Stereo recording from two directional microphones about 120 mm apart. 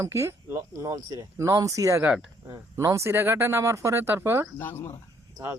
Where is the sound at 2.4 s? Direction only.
25° right (ahead or behind).